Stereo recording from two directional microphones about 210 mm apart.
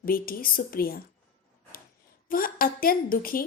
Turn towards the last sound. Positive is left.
turn(degrees=45)  # may be behind; listen again after turning